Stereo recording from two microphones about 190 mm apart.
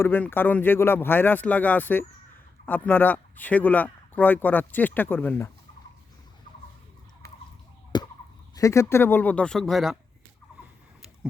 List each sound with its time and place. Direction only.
0.0 s speech: 10° left (ahead or behind)
7.9 s a sound: 25° left (ahead or behind)
8.5 s speech: 15° left (ahead or behind); by 10.0 s centre (ahead or behind)